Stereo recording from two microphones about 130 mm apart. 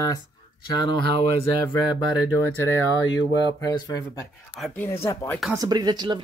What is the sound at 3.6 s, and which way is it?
Speech, 30° left (ahead or behind).